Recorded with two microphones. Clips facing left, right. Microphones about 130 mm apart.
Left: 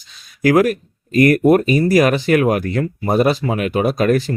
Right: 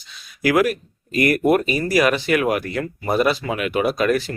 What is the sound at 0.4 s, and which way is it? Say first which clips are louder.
Speech: left 4 dB; 40° left (ahead or behind).